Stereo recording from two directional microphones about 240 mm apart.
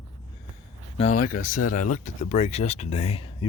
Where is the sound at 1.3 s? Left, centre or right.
Left.